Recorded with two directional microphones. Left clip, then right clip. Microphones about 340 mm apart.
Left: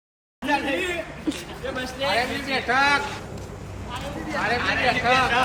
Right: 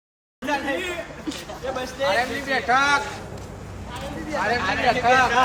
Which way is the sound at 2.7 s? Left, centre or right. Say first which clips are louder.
Right 1 dB; centre.